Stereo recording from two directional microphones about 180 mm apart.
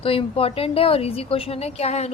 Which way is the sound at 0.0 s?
30° left (ahead or behind).